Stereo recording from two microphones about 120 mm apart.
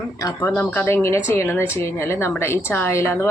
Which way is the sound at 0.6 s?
10° left (ahead or behind).